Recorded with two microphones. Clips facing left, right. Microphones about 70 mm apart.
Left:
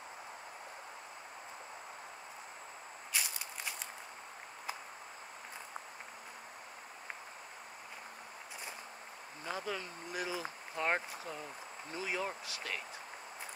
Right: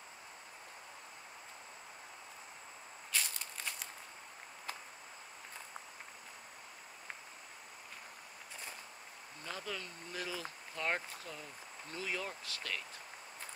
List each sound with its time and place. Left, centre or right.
3.1 s walk: centre
9.4 s speech: centre